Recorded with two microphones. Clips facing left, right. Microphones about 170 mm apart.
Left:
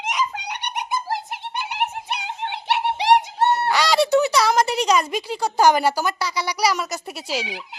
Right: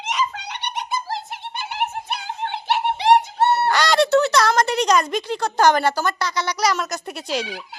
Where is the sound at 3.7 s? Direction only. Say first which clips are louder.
Right 1 dB; centre (ahead or behind).